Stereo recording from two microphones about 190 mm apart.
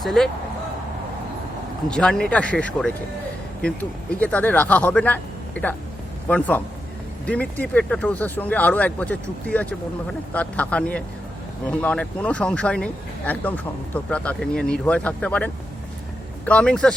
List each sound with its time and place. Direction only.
0.0 s speech: centre (ahead or behind)
1.9 s speech: 5° left (ahead or behind)
16.5 s speech: 5° left (ahead or behind)